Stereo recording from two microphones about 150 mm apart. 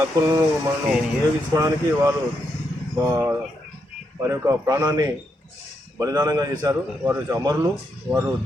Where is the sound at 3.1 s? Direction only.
15° right (ahead or behind).